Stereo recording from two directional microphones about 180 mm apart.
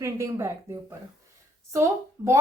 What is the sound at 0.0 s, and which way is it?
A woman's voice, 15° right (ahead or behind).